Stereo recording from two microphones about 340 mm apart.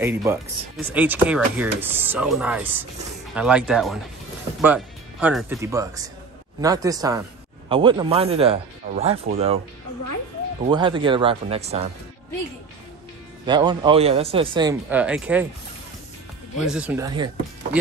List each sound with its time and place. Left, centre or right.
0.0 s speech: centre
10.6 s speech: centre
13.5 s speech: centre
16.5 s speech: centre